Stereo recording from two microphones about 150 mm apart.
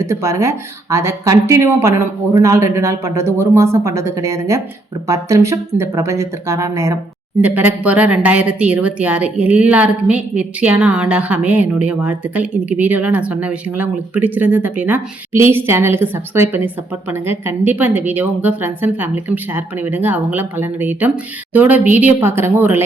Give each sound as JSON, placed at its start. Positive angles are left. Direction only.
{"t": 0.0, "sound": "a woman's voice", "side_deg": -20}